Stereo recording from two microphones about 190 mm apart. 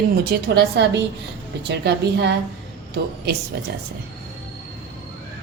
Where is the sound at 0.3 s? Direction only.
60° right (ahead or behind).